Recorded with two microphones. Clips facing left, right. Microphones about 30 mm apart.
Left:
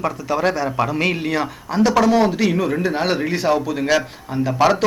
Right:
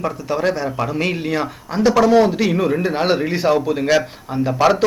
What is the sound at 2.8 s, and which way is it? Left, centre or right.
Speech, centre.